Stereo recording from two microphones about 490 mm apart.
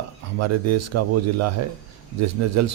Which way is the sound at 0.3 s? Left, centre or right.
Right.